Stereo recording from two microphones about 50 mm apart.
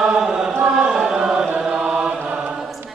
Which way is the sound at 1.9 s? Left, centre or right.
Centre.